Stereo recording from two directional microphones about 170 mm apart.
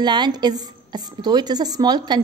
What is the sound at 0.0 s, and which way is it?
A woman's voice, 25° right (ahead or behind).